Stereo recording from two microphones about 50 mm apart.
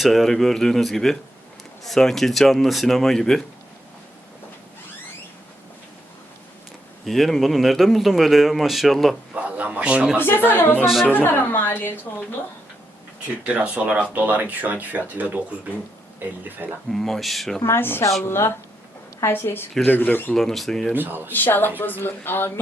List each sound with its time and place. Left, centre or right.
0.0 s speech: centre
7.0 s speech: centre
9.3 s a man's voice: right
10.2 s a woman's voice: left
13.4 s speech: right
16.9 s speech: centre
17.7 s a woman's voice: left
19.3 s a woman's voice: left
20.3 s speech: centre
20.9 s speech: right
21.3 s a woman's voice: left